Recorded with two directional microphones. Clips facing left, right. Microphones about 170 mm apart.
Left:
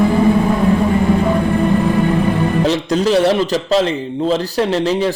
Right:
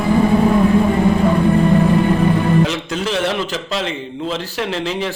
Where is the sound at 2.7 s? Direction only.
35° left (ahead or behind).